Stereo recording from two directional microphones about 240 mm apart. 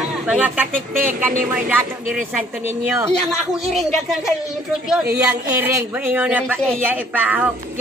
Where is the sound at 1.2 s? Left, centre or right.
Centre.